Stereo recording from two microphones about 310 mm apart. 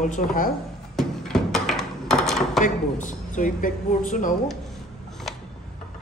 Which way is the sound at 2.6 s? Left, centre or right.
Left.